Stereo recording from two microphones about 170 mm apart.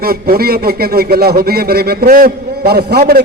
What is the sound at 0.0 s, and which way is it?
A man's voice, 65° right (ahead or behind).